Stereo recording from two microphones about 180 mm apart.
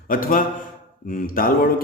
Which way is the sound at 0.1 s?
50° left (ahead or behind).